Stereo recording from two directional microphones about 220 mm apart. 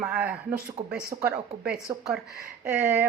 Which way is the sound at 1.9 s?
15° right (ahead or behind).